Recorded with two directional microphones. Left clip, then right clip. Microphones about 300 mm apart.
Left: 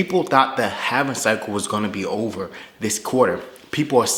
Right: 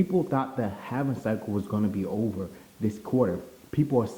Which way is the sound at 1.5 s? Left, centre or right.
Left.